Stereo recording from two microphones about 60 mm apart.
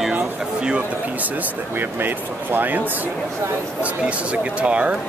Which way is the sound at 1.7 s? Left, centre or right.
Right.